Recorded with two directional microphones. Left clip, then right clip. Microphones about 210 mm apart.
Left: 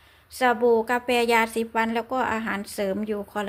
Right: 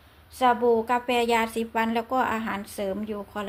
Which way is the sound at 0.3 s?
25° left (ahead or behind).